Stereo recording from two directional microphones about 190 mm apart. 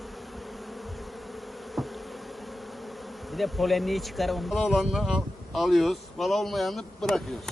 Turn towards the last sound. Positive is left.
turn(degrees=0)  # may be behind; listen again after turning